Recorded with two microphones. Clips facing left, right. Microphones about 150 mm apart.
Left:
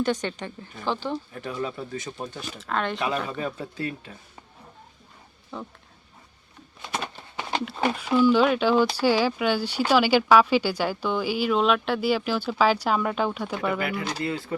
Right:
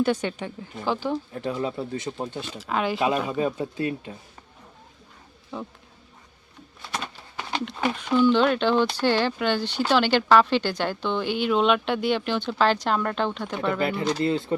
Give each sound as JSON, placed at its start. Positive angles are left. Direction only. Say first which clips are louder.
{"t": 0.0, "sound": "speech", "louder": "right 2 dB", "side_deg": -10}
{"t": 1.3, "sound": "speech", "louder": "right 3 dB", "side_deg": -25}
{"t": 2.6, "sound": "speech", "louder": "right 2 dB", "side_deg": -5}
{"t": 3.3, "sound": "speech", "louder": "right 5 dB", "side_deg": -20}
{"t": 5.5, "sound": "speech", "louder": "right 2 dB", "side_deg": 0}
{"t": 7.9, "sound": "speech", "louder": "even", "side_deg": 10}
{"t": 13.7, "sound": "speech", "louder": "right 4 dB", "side_deg": -25}